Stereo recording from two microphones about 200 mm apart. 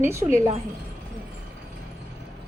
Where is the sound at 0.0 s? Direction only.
15° right (ahead or behind).